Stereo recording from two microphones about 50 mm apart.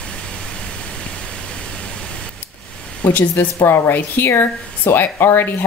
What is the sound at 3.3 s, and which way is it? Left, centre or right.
Speech, left.